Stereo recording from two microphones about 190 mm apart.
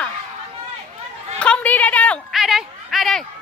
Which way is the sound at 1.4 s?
5° left (ahead or behind).